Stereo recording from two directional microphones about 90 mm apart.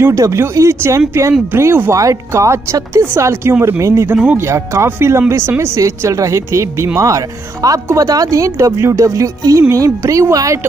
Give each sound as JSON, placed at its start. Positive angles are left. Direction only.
{"t": 0.0, "sound": "speech", "side_deg": -35}
{"t": 4.1, "sound": "speech", "side_deg": -15}
{"t": 4.4, "sound": "speech", "side_deg": -30}